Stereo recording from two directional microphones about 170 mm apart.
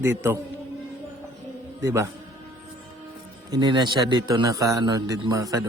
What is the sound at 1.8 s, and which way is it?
Speech, 15° right (ahead or behind).